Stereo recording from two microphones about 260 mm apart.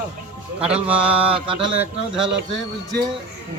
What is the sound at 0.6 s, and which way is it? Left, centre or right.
A man's voice, centre.